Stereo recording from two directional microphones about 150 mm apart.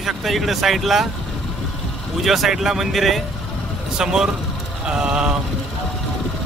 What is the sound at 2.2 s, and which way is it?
Speech, centre (ahead or behind).